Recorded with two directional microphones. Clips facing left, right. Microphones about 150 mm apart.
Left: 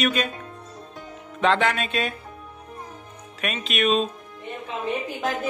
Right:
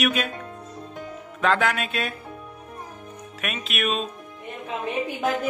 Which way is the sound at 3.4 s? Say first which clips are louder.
Left 4 dB; 5° right (ahead or behind).